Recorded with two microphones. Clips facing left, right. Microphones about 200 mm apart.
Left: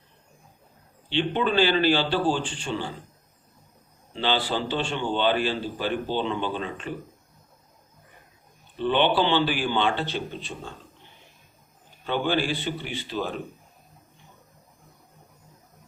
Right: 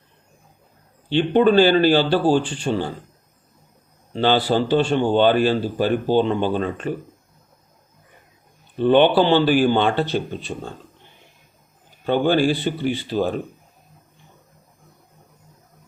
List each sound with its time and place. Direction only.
1.1 s speech: 45° right (ahead or behind)
4.1 s speech: 45° right (ahead or behind)
8.7 s speech: 45° right (ahead or behind)
12.0 s speech: 45° right (ahead or behind)